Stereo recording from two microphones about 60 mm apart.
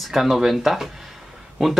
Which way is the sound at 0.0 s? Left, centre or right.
Centre.